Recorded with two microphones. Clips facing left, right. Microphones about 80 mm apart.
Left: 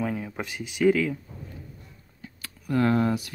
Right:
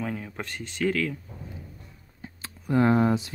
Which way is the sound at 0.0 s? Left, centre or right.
Centre.